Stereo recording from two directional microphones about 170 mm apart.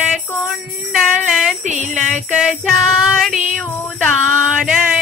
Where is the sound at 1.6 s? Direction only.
45° right (ahead or behind).